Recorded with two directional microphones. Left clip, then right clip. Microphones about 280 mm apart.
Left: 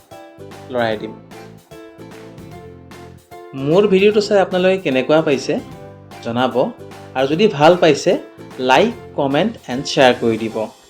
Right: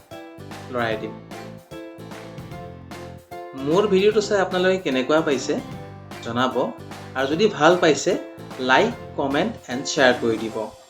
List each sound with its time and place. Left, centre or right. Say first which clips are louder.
0.7 s speech: left 5 dB; centre
3.3 s music: left 4 dB; centre
3.7 s speech: left 5 dB; left